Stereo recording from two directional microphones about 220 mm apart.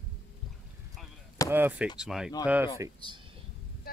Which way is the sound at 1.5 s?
10° right (ahead or behind).